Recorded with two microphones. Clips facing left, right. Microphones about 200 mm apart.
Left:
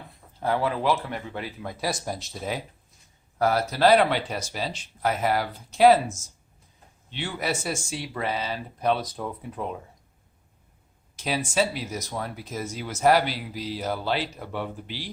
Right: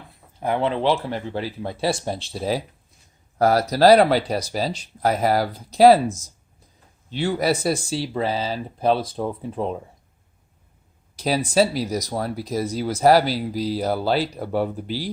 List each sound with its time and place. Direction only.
0.3 s speech: 20° right (ahead or behind)
11.2 s speech: 35° right (ahead or behind)